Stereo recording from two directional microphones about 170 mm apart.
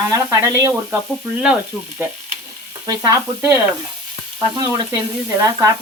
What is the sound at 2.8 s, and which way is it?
Stir, 20° right (ahead or behind).